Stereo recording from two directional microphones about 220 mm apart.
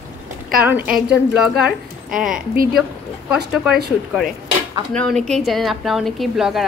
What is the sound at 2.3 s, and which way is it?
Speech, 40° right (ahead or behind).